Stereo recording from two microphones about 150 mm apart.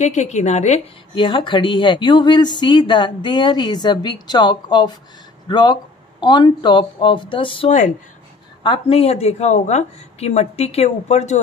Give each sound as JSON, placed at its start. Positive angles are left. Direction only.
{"t": 0.0, "sound": "speech", "side_deg": 50}
{"t": 1.1, "sound": "speech", "side_deg": 35}